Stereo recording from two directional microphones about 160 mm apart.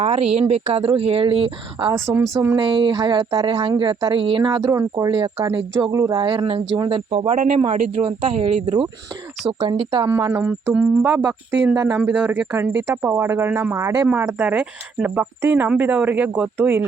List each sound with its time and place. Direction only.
0.0 s speech: 40° right (ahead or behind)
1.9 s speech: 15° right (ahead or behind)
2.6 s speech: 30° right (ahead or behind)
5.1 s speech: 30° right (ahead or behind)
7.3 s speech: 55° right (ahead or behind)
8.0 s speech: 35° right (ahead or behind)
9.5 s speech: 30° right (ahead or behind); by 16.8 s 10° right (ahead or behind)